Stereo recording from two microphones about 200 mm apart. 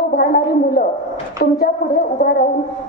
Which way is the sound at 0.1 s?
50° left (ahead or behind).